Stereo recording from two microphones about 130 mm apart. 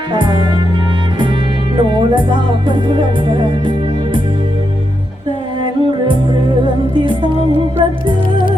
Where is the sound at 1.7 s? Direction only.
35° right (ahead or behind).